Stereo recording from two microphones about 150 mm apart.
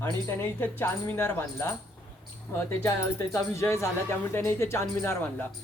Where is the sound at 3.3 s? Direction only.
20° left (ahead or behind).